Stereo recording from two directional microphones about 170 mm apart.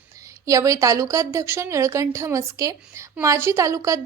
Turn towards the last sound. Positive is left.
turn(degrees=-20)  # may be behind; listen again after turning